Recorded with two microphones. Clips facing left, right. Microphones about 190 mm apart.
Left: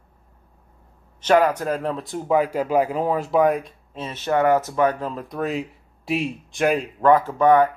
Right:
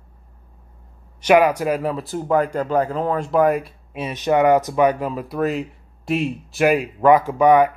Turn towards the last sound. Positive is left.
turn(degrees=-15)  # may be behind; listen again after turning